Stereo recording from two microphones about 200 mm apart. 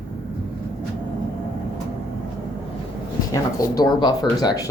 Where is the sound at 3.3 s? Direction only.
15° left (ahead or behind).